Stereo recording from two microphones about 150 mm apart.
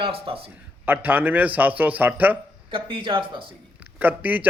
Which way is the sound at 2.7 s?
35° right (ahead or behind).